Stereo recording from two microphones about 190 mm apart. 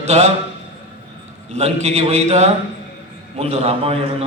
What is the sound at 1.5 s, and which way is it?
A man's voice, 35° right (ahead or behind).